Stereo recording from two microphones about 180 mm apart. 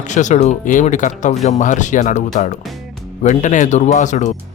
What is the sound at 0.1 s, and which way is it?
Speech, 40° left (ahead or behind).